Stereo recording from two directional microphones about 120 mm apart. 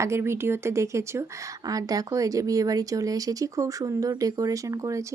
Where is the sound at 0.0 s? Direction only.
20° right (ahead or behind).